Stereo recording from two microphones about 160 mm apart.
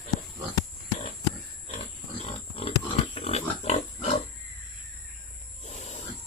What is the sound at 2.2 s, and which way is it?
Pig, 35° left (ahead or behind).